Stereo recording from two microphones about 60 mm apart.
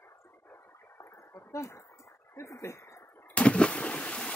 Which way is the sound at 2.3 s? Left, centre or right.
Left.